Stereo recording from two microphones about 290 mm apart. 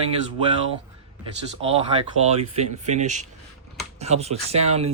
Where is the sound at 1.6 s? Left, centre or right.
Centre.